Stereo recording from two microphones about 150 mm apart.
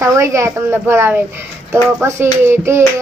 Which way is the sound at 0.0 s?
20° right (ahead or behind).